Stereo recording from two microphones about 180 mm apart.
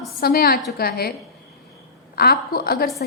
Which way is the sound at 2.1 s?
55° left (ahead or behind).